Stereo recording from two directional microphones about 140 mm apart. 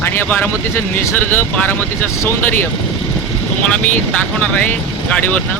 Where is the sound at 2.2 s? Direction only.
15° left (ahead or behind).